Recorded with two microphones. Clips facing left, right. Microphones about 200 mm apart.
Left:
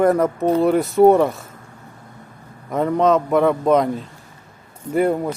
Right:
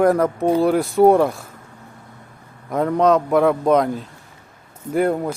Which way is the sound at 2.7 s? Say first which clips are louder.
Even; centre (ahead or behind).